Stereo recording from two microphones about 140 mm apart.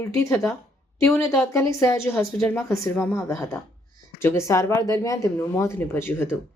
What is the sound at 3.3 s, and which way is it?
A woman's voice, 20° left (ahead or behind).